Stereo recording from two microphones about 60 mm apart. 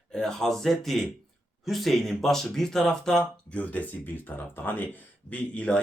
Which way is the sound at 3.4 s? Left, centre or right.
Left.